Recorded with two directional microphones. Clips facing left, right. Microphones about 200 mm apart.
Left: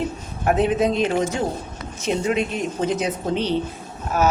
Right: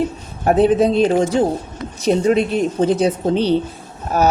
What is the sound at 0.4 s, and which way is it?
A woman's voice, 35° right (ahead or behind).